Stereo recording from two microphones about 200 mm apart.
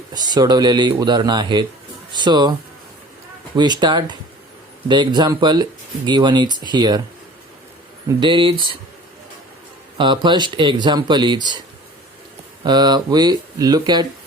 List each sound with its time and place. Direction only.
0.1 s a man's voice: 20° right (ahead or behind)
8.2 s a man's voice: 25° right (ahead or behind)
10.0 s a man's voice: 25° right (ahead or behind)
12.6 s a man's voice: 20° right (ahead or behind)